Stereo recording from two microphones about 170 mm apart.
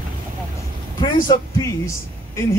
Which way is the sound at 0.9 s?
20° left (ahead or behind).